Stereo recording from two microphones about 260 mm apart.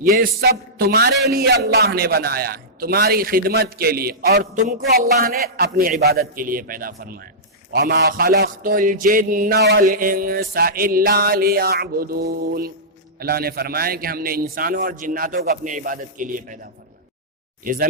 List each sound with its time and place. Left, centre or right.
0.0 s a man's voice: right
17.6 s speech: right